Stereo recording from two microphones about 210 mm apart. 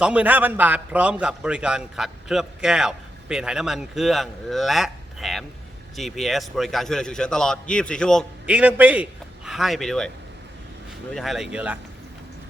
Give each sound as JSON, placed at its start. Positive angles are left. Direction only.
{"t": 0.0, "sound": "a man's voice", "side_deg": -5}
{"t": 11.1, "sound": "a man's voice", "side_deg": 0}